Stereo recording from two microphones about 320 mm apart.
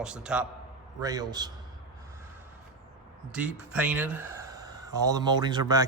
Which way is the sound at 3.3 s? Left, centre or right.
Centre.